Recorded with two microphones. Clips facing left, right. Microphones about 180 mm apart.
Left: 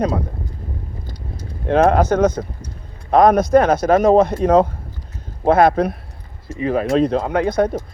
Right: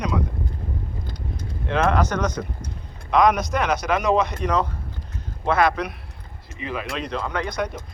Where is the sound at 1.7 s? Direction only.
50° left (ahead or behind).